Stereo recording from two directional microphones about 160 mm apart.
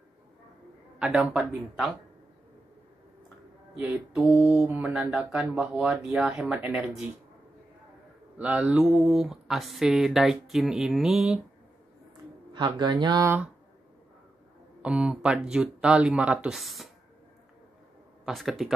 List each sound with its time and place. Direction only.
0.9 s speech: 5° right (ahead or behind)
3.7 s mantra: 5° right (ahead or behind)
8.4 s speech: 10° right (ahead or behind)
12.5 s speech: 25° right (ahead or behind)
14.8 s speech: 5° right (ahead or behind)
18.2 s speech: centre (ahead or behind)